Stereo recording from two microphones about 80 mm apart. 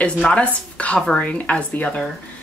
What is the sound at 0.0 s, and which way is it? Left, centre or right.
Speech, centre.